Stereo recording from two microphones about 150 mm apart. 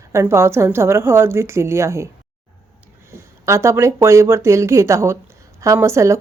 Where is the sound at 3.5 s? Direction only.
20° right (ahead or behind).